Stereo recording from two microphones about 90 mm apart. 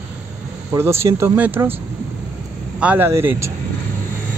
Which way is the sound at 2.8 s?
15° right (ahead or behind).